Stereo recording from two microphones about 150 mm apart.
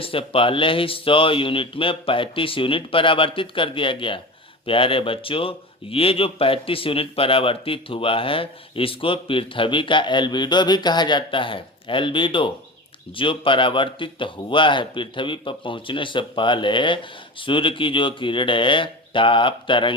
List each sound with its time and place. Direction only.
0.0 s a man's voice: 35° left (ahead or behind)